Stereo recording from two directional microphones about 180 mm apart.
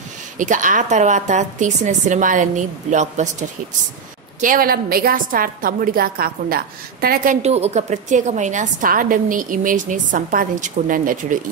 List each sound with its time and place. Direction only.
0.4 s a woman's voice: 45° right (ahead or behind)
7.4 s a woman's voice: 35° right (ahead or behind)